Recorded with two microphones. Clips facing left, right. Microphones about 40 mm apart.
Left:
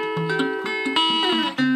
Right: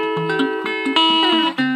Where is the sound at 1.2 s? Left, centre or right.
Right.